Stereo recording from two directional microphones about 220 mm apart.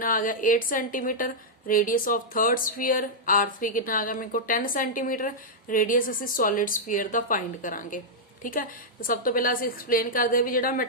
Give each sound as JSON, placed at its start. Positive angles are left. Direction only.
{"t": 0.0, "sound": "a woman's voice", "side_deg": 40}